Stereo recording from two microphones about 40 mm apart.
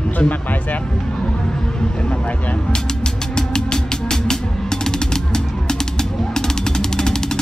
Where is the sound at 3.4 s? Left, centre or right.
Centre.